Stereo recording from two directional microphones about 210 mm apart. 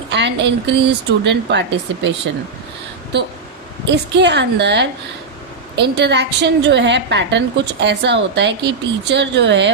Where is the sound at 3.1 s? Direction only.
55° right (ahead or behind).